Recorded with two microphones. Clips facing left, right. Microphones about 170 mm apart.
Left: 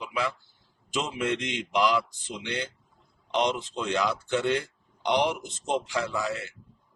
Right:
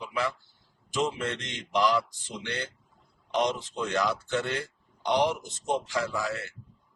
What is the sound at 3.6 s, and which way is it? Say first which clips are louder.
Speech: left 1 dB; 15° left (ahead or behind).